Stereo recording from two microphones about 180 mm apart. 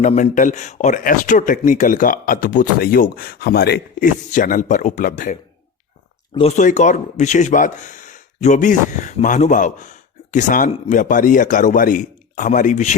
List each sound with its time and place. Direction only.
0.0 s speech: 45° left (ahead or behind)
6.6 s speech: 40° left (ahead or behind)